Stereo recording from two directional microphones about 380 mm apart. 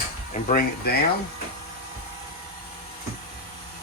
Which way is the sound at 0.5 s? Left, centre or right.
Left.